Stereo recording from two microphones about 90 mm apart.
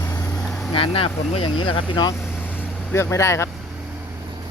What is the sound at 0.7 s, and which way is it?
Speech, 90° left.